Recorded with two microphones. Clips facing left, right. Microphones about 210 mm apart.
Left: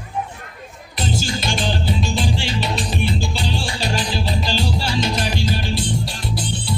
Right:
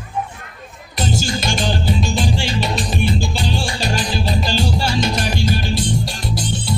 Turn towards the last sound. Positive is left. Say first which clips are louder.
# right 2 dB
turn(degrees=-45)  # may be behind; listen again after turning